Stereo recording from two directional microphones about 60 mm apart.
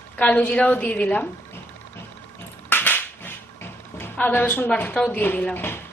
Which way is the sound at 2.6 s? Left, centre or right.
Left.